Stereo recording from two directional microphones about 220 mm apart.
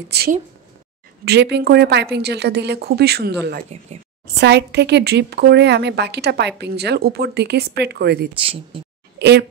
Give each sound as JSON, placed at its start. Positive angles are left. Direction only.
{"t": 0.1, "sound": "a woman's voice", "side_deg": -45}
{"t": 3.7, "sound": "speech", "side_deg": -30}
{"t": 4.4, "sound": "a woman's voice", "side_deg": -50}